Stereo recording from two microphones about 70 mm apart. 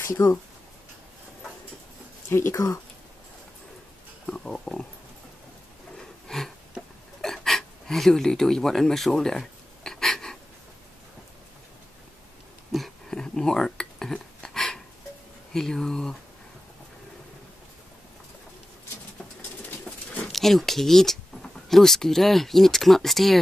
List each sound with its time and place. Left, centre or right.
0.0 s speech: left
2.2 s speech: left
4.3 s speech: centre
6.2 s a sound: centre
7.2 s gasp: centre
12.7 s a sound: centre
15.5 s speech: centre
20.2 s speech: centre